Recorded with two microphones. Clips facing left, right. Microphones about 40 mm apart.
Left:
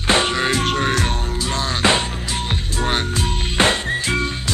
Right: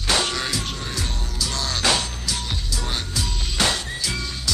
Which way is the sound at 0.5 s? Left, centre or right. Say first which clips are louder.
Left 10 dB; left.